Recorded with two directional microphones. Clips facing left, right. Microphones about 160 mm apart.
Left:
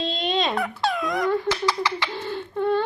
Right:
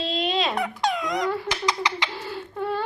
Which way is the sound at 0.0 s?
5° right (ahead or behind).